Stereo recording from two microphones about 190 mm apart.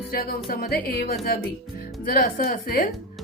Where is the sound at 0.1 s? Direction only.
55° left (ahead or behind).